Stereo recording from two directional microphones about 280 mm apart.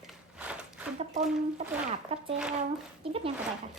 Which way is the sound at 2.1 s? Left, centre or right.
Right.